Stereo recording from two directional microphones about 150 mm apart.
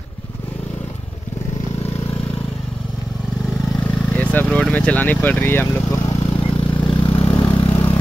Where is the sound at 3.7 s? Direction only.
10° left (ahead or behind).